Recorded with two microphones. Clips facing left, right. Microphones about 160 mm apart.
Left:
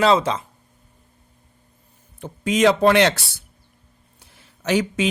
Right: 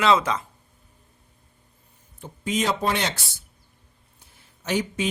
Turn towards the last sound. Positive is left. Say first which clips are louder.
# left 5 dB
turn(degrees=90)